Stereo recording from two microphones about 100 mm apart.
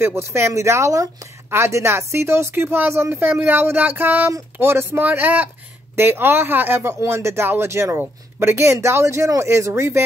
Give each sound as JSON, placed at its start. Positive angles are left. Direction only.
{"t": 0.0, "sound": "speech", "side_deg": -25}